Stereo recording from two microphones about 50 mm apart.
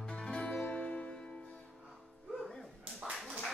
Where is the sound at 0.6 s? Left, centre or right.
Left.